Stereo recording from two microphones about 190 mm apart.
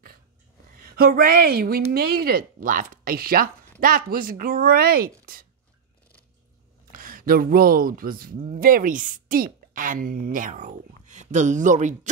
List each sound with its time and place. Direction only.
0.7 s speech: 50° right (ahead or behind)
5.2 s writing: 50° right (ahead or behind)
7.0 s speech: 45° right (ahead or behind)